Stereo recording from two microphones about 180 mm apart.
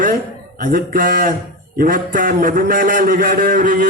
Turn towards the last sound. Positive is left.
turn(degrees=-50)  # may be behind; listen again after turning